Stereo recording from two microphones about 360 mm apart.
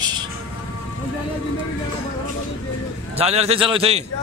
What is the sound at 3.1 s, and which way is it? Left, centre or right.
Speech, centre.